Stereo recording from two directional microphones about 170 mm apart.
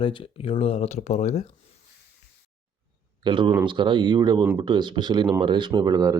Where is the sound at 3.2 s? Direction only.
30° right (ahead or behind).